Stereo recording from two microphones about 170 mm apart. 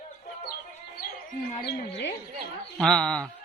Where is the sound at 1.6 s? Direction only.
90° left.